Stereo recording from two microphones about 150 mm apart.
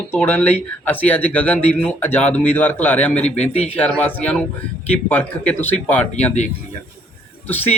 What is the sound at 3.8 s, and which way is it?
A man's voice, 10° left (ahead or behind).